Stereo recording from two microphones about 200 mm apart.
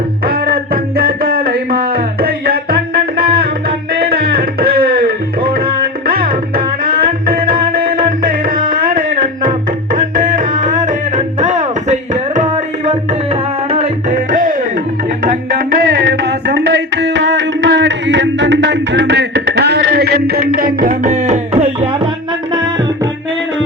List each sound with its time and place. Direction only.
0.3 s music: 45° right (ahead or behind); by 22.1 s 25° right (ahead or behind)